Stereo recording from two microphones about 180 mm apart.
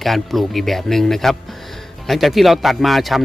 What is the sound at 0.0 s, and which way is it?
Speech, centre (ahead or behind).